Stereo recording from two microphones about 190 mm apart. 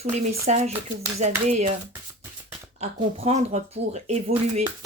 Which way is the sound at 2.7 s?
35° right (ahead or behind).